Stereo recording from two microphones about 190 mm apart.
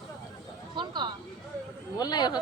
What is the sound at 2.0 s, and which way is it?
Speech, 20° left (ahead or behind).